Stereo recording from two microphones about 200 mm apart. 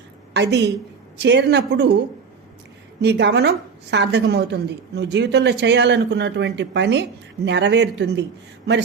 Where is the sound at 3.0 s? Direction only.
60° right (ahead or behind).